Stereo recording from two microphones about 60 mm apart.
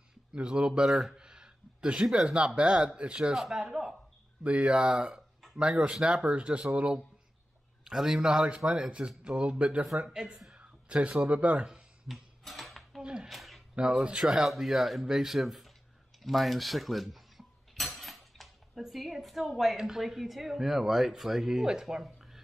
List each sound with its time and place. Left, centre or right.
0.3 s speech: centre
1.1 s a sound: centre
2.1 s speech: centre
4.4 s speech: centre
6.2 s speech: right
12.1 s cutlery: centre
13.0 s a sound: centre
13.3 s a sound: centre
13.7 s speech: centre
14.2 s speech: centre